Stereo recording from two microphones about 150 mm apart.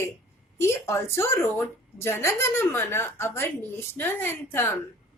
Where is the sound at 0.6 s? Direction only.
15° left (ahead or behind).